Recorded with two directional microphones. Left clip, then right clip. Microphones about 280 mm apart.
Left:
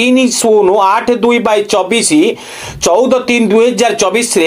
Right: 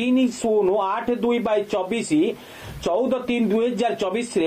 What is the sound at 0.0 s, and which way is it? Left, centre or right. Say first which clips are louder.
A man's voice: left 12 dB; left.